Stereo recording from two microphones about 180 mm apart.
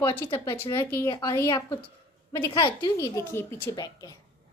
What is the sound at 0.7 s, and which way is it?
A woman's voice, 15° left (ahead or behind).